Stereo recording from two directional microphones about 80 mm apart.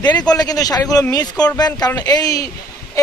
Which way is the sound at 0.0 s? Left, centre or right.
Left.